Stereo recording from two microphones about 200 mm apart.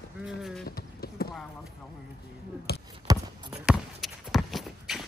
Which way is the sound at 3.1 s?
20° right (ahead or behind).